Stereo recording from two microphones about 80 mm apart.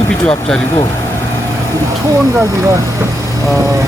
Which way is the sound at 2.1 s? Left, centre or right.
Right.